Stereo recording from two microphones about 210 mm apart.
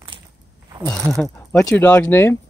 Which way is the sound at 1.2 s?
10° left (ahead or behind).